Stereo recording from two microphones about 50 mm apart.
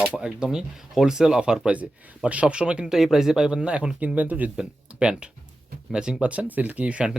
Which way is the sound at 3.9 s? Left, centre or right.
Right.